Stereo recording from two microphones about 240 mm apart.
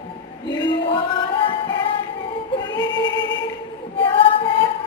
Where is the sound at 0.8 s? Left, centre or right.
Left.